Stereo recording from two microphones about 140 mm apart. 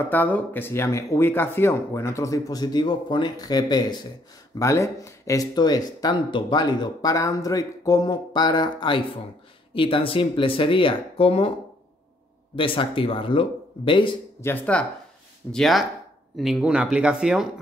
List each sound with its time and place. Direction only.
0.0 s speech: 10° left (ahead or behind); by 11.5 s 45° left (ahead or behind)
12.5 s speech: 40° left (ahead or behind)
14.4 s speech: 10° left (ahead or behind)
15.5 s speech: centre (ahead or behind)